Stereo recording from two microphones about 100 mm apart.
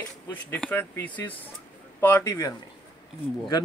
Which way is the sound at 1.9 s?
30° left (ahead or behind).